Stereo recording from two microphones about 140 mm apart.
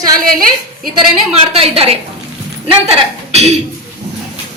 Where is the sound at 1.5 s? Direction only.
45° right (ahead or behind).